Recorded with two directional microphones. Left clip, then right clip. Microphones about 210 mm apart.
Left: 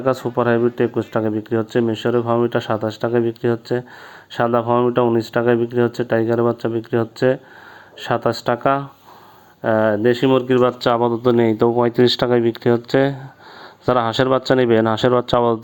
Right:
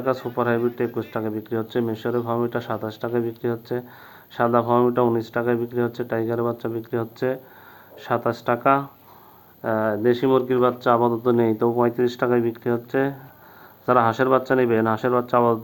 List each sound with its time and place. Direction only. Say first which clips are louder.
0.0 s speech: left 5 dB; 40° left (ahead or behind)